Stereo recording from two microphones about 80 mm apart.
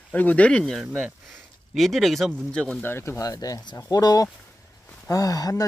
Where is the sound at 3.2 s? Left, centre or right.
Left.